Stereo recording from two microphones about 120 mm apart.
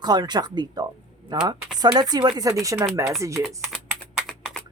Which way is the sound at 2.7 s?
20° right (ahead or behind).